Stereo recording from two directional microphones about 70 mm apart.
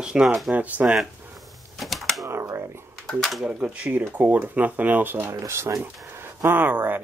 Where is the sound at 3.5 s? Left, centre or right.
Centre; by 5.9 s right.